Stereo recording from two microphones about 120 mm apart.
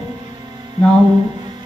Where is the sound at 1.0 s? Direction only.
40° right (ahead or behind).